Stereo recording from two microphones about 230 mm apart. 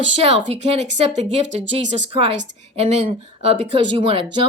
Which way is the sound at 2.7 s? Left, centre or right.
Right.